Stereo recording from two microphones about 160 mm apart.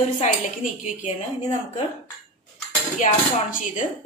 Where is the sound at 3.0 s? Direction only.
55° left (ahead or behind).